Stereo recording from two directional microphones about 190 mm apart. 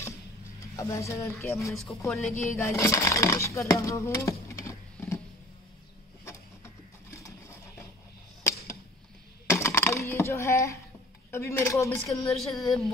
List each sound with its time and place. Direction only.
0.6 s speech: 15° left (ahead or behind)
2.0 s a woman's voice: centre (ahead or behind)
2.4 s speech: 15° left (ahead or behind)
6.2 s printer: 15° left (ahead or behind)
9.5 s typing: 15° left (ahead or behind)
11.3 s speech: 15° left (ahead or behind)
12.4 s a woman's voice: centre (ahead or behind)